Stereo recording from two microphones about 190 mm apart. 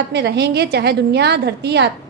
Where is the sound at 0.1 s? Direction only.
60° right (ahead or behind).